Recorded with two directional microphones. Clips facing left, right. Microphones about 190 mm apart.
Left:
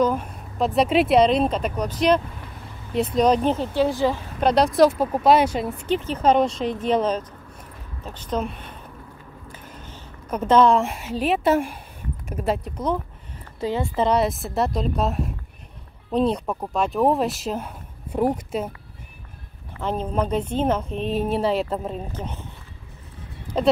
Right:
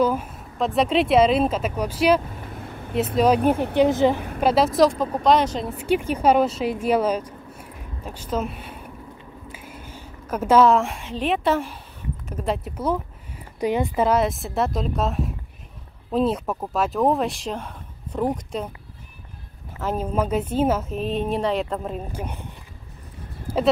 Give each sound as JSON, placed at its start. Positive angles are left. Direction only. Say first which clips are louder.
{"t": 0.0, "sound": "speech", "louder": "even", "side_deg": -5}
{"t": 3.7, "sound": "a woman's voice", "louder": "right 5 dB", "side_deg": -20}
{"t": 4.4, "sound": "speech", "louder": "left 1 dB", "side_deg": -5}
{"t": 5.8, "sound": "a woman's voice", "louder": "right 2 dB", "side_deg": -10}
{"t": 12.6, "sound": "speech", "louder": "even", "side_deg": -5}
{"t": 14.0, "sound": "speech", "louder": "left 3 dB", "side_deg": 0}
{"t": 19.8, "sound": "speech", "louder": "even", "side_deg": -5}
{"t": 21.9, "sound": "speech", "louder": "even", "side_deg": -10}
{"t": 23.5, "sound": "a sound", "louder": "right 1 dB", "side_deg": -10}